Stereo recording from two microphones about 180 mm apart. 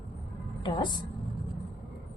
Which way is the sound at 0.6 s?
25° left (ahead or behind).